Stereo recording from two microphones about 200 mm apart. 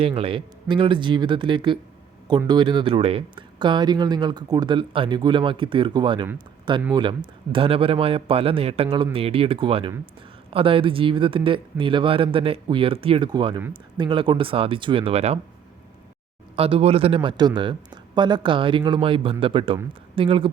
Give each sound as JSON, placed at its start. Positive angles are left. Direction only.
{"t": 0.0, "sound": "speech", "side_deg": -25}
{"t": 13.6, "sound": "speech", "side_deg": -10}
{"t": 14.0, "sound": "speech", "side_deg": -25}
{"t": 16.6, "sound": "speech", "side_deg": -30}